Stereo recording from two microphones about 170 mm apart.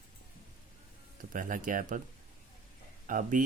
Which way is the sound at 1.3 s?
50° right (ahead or behind).